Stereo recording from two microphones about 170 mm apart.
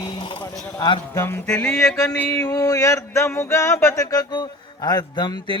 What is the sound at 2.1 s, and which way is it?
Speech, 10° left (ahead or behind).